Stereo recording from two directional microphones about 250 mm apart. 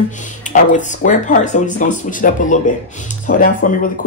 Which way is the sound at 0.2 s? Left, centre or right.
Left.